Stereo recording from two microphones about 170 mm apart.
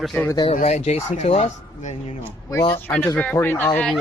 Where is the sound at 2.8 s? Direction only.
10° left (ahead or behind).